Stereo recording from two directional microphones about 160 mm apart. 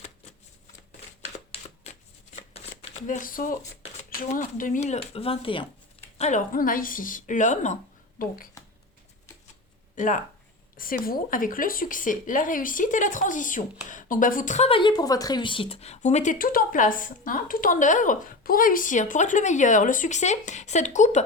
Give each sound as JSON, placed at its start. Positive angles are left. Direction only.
{"t": 3.1, "sound": "speech", "side_deg": 55}
{"t": 6.1, "sound": "a woman's voice", "side_deg": 45}
{"t": 6.5, "sound": "speech", "side_deg": 60}
{"t": 8.2, "sound": "speech", "side_deg": 60}
{"t": 9.9, "sound": "speech", "side_deg": 55}